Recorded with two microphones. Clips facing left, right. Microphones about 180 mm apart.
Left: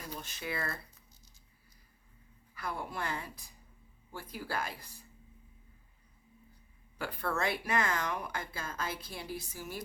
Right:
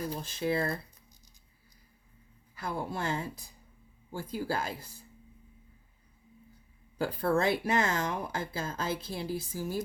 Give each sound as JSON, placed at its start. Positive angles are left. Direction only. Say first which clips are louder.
{"t": 0.1, "sound": "speech", "louder": "right 5 dB", "side_deg": -30}
{"t": 2.6, "sound": "speech", "louder": "right 4 dB", "side_deg": -25}
{"t": 7.0, "sound": "speech", "louder": "right 7 dB", "side_deg": -30}